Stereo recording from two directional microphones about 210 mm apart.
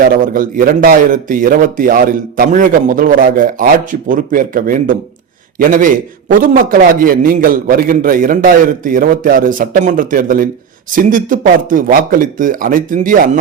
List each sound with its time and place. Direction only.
0.1 s a man's voice: 40° right (ahead or behind)